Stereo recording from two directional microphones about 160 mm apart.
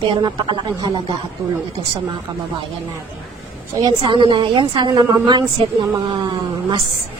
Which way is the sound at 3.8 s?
25° right (ahead or behind).